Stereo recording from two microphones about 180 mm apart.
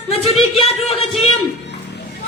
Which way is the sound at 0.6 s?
35° left (ahead or behind).